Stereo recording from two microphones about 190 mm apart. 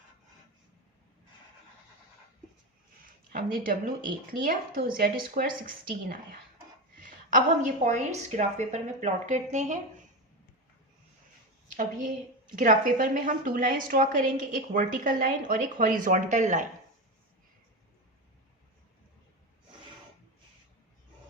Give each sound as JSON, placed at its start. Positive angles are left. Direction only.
{"t": 3.3, "sound": "a woman's voice", "side_deg": -50}
{"t": 7.3, "sound": "a woman's voice", "side_deg": -40}
{"t": 11.7, "sound": "a woman's voice", "side_deg": -45}